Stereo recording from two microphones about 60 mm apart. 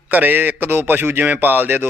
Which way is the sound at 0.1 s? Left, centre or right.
Right.